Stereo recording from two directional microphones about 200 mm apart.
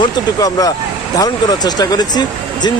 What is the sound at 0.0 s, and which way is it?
Speech, 20° left (ahead or behind).